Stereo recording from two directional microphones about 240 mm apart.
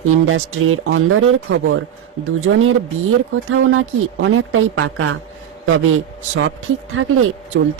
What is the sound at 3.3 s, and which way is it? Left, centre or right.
A woman's voice, right.